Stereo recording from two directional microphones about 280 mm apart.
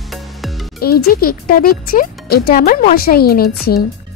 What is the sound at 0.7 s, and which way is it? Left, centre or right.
Speech, left.